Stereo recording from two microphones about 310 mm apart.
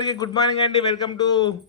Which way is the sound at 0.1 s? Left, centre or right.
Centre.